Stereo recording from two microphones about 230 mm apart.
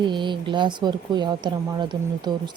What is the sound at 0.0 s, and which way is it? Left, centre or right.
Speech, centre.